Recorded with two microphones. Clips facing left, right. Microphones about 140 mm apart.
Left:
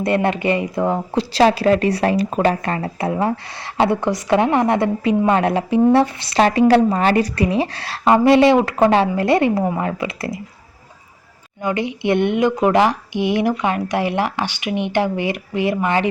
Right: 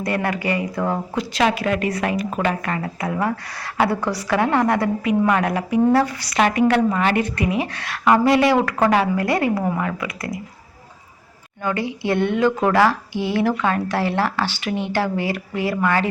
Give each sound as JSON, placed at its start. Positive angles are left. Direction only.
{"t": 0.0, "sound": "speech", "side_deg": 25}
{"t": 11.6, "sound": "a woman's voice", "side_deg": 20}